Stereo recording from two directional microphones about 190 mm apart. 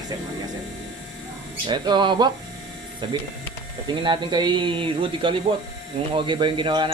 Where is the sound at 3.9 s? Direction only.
25° right (ahead or behind).